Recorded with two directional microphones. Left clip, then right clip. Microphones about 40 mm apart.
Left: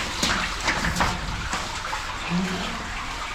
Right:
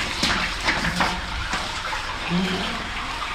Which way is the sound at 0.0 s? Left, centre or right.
Left.